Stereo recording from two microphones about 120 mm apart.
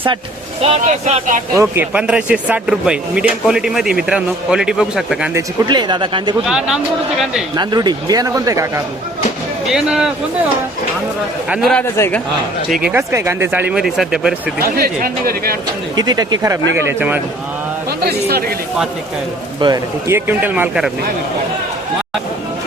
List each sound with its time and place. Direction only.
0.6 s speech: 60° right (ahead or behind)
1.5 s speech: 20° right (ahead or behind); by 5.3 s 5° right (ahead or behind)
5.6 s speech: 40° right (ahead or behind)
6.4 s speech: 5° right (ahead or behind)
7.5 s speech: 40° right (ahead or behind)
9.7 s speech: 5° right (ahead or behind)
11.4 s speech: 10° right (ahead or behind)
11.9 s a man's voice: 20° left (ahead or behind)
13.0 s speech: 25° right (ahead or behind)
13.8 s speech: 5° right (ahead or behind)
16.0 s speech: 35° right (ahead or behind); by 17.2 s 20° right (ahead or behind)
19.5 s speech: 35° right (ahead or behind)
20.1 s speech: 20° right (ahead or behind)